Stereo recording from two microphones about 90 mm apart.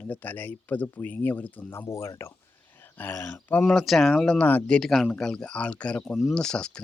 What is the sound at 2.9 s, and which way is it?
Speech, 20° left (ahead or behind).